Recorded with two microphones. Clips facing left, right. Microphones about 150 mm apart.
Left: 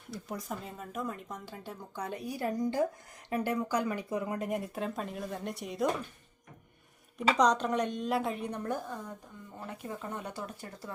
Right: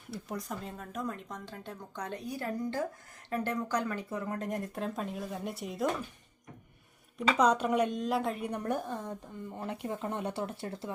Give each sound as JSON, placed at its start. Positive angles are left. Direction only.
{"t": 0.1, "sound": "speech", "side_deg": 0}
{"t": 7.3, "sound": "speech", "side_deg": -5}
{"t": 8.4, "sound": "a woman's voice", "side_deg": -15}